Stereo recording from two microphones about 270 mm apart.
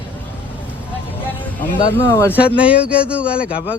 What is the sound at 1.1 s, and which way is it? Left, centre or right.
Music, centre.